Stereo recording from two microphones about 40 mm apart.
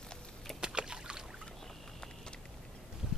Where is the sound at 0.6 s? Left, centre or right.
Centre.